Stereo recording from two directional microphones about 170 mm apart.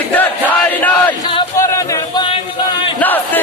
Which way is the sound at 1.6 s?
20° left (ahead or behind).